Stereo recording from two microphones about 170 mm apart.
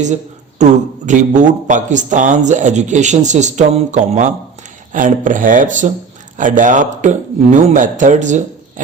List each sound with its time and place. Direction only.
0.6 s a man's voice: 45° right (ahead or behind)